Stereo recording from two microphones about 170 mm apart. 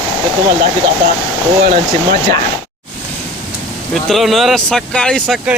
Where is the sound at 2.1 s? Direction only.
25° left (ahead or behind).